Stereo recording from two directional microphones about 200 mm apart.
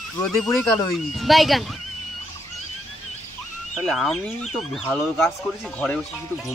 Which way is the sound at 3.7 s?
Centre (ahead or behind).